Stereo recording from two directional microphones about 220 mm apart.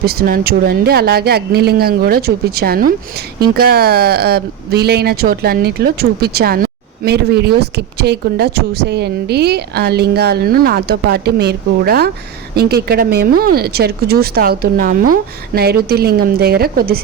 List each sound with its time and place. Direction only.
0.0 s speech: 45° right (ahead or behind)